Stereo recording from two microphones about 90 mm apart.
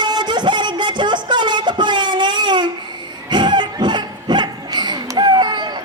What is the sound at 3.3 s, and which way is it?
Music, 55° right (ahead or behind).